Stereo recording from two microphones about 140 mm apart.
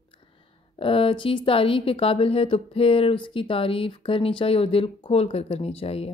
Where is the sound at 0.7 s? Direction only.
40° left (ahead or behind).